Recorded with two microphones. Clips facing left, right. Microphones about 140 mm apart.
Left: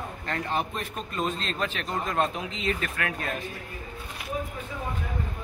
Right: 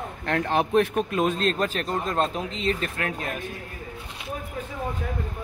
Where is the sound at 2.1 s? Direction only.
30° right (ahead or behind).